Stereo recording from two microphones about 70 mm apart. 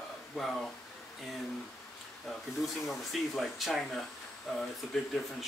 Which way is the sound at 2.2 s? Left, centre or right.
Centre.